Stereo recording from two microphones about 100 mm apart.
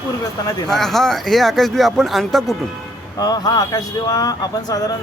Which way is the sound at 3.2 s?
40° left (ahead or behind).